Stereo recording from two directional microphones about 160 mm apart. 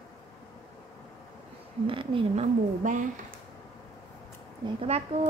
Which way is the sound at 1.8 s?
30° right (ahead or behind).